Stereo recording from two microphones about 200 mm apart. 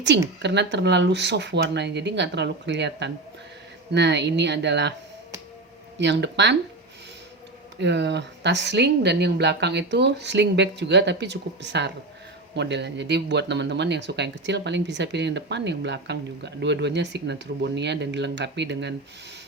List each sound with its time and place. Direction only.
0.4 s speech: 60° right (ahead or behind)
6.0 s speech: 60° right (ahead or behind)
7.8 s speech: 60° right (ahead or behind)